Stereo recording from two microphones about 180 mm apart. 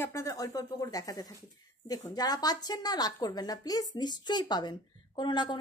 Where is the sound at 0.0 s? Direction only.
15° left (ahead or behind).